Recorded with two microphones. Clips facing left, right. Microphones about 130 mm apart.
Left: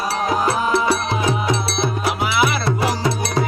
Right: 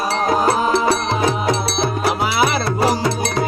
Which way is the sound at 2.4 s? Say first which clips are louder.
Right 1 dB; 35° right (ahead or behind).